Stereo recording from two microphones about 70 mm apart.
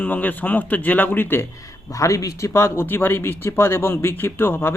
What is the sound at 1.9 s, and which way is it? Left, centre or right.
Speech, left.